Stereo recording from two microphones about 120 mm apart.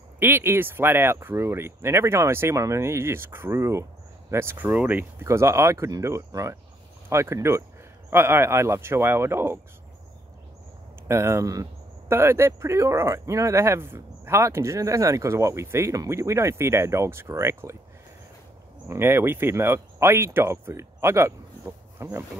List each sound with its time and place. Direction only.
0.2 s speech: 15° right (ahead or behind)
5.2 s speech: 25° right (ahead or behind)
11.1 s speech: 20° right (ahead or behind)
18.9 s speech: 20° right (ahead or behind)